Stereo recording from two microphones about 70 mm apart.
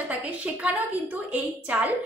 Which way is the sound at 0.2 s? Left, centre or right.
Right.